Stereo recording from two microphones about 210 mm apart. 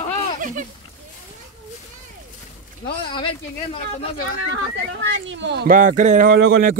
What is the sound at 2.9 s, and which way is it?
Speech, 25° left (ahead or behind).